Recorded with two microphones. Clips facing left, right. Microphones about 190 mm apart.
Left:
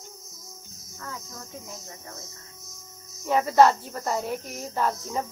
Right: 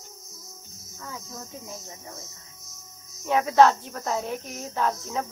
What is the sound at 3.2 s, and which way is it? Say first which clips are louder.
Speech: even; 5° left (ahead or behind).